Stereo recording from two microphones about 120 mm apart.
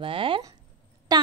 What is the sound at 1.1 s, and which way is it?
Speech, 35° right (ahead or behind).